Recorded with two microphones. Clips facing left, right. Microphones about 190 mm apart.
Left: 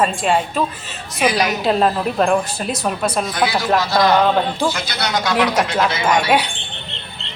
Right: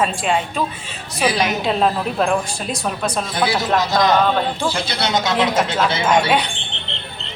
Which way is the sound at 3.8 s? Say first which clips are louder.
Left 1 dB; 20° right (ahead or behind).